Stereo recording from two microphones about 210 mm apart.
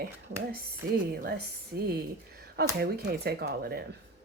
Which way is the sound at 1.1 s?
45° right (ahead or behind).